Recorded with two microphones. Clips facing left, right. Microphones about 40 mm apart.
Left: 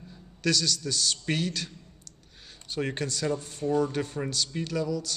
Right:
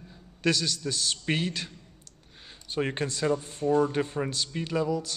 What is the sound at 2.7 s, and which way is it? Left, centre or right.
A man's voice, centre.